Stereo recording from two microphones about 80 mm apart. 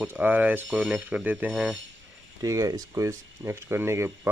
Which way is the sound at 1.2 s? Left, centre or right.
Right.